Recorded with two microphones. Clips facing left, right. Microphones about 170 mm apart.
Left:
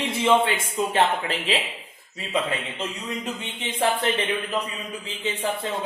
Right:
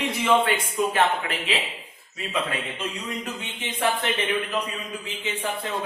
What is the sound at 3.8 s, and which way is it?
Speech, 30° left (ahead or behind).